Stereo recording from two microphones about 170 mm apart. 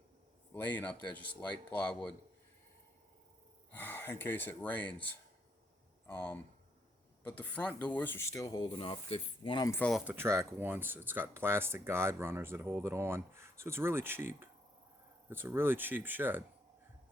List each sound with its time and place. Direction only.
0.5 s speech: 10° left (ahead or behind)
3.7 s speech: 10° left (ahead or behind)
6.1 s speech: 10° left (ahead or behind); by 9.7 s 25° left (ahead or behind)
9.9 s speech: 10° right (ahead or behind)